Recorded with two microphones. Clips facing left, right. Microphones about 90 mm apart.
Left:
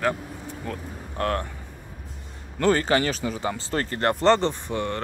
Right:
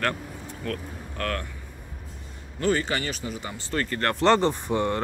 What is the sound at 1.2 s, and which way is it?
Speech, 30° left (ahead or behind).